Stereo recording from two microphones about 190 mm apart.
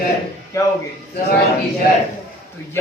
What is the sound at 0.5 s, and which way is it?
Speech, 15° left (ahead or behind).